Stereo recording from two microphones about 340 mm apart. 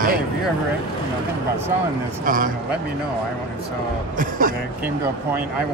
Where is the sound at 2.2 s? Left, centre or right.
Right.